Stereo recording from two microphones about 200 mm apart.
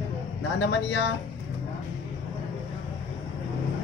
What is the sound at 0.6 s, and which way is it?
Speech, 60° left (ahead or behind).